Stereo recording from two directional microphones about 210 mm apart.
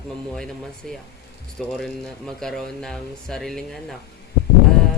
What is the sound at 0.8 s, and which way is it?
Speech, 5° left (ahead or behind).